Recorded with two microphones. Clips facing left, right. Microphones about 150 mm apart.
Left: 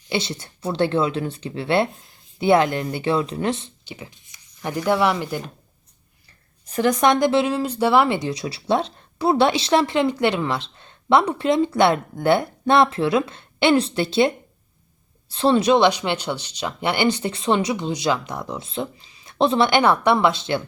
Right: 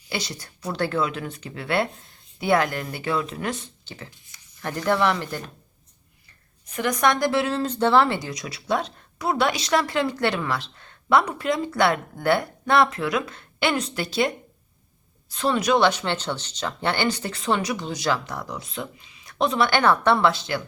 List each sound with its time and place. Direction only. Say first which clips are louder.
0.1 s speech: left 6 dB; 25° left (ahead or behind)
1.9 s speech: left 2 dB; centre (ahead or behind)
2.4 s speech: left 5 dB; 25° left (ahead or behind)
3.8 s speech: left 3 dB; 15° left (ahead or behind)
6.7 s speech: left 4 dB; 30° left (ahead or behind)
7.5 s speech: left 1 dB; 10° left (ahead or behind)
8.2 s speech: left 7 dB; 30° left (ahead or behind)